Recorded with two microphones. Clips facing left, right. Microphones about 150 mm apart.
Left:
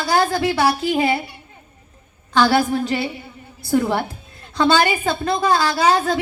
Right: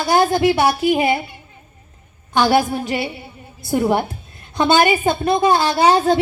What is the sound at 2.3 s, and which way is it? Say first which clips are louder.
A woman's voice: right 1 dB; 20° right (ahead or behind).